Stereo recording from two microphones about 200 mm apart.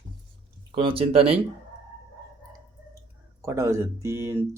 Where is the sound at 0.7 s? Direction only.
25° right (ahead or behind).